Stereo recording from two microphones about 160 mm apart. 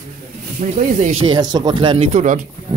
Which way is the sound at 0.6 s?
50° right (ahead or behind).